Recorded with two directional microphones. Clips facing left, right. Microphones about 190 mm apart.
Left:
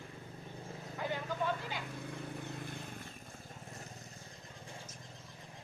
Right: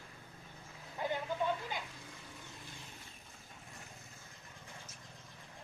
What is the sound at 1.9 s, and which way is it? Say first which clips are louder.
Vehicle: left 10 dB; 60° left (ahead or behind).